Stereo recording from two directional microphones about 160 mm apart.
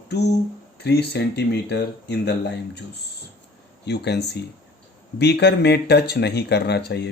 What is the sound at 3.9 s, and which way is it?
Speech, 90° left.